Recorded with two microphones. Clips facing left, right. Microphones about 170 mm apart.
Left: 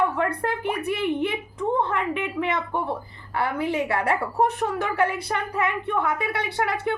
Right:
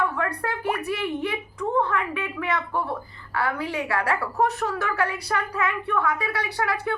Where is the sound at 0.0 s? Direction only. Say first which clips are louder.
Left 3 dB; 25° left (ahead or behind).